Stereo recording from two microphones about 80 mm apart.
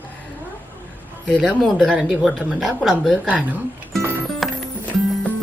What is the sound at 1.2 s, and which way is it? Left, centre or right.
Speech, centre.